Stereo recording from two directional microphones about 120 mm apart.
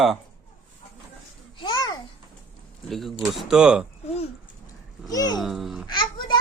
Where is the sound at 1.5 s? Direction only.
40° left (ahead or behind).